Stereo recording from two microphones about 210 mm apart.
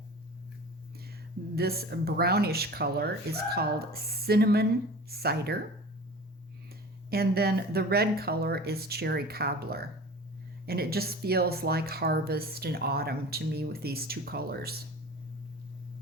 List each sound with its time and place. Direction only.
1.5 s speech: 50° right (ahead or behind)
7.1 s speech: 45° right (ahead or behind)